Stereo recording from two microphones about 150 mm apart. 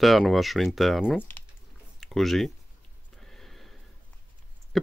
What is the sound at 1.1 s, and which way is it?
Speech, 10° left (ahead or behind).